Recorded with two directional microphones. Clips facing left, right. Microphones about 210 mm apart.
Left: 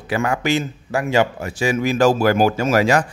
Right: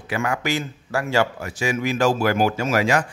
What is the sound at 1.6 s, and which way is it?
Speech, 35° left (ahead or behind).